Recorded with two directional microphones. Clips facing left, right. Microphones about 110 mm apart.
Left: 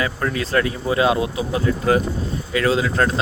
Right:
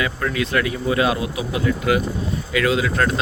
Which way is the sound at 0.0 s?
30° left (ahead or behind).